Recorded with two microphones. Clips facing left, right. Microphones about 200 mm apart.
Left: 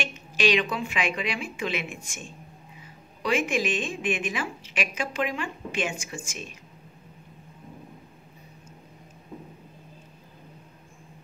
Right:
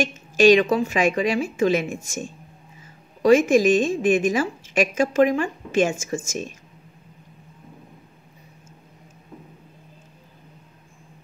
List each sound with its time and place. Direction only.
0.0 s a woman's voice: 45° right (ahead or behind)